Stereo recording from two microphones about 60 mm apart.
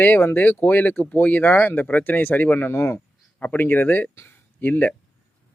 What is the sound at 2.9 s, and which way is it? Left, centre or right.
Speech, left.